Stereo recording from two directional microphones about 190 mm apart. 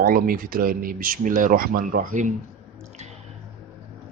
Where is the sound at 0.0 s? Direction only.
50° right (ahead or behind).